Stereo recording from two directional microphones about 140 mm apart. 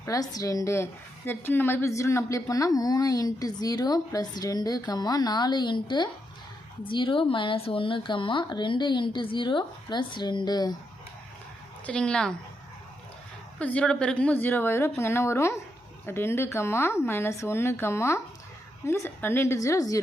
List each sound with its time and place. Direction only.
0.0 s a woman's voice: 25° left (ahead or behind)
11.9 s speech: 5° left (ahead or behind)
13.6 s a woman's voice: 10° left (ahead or behind)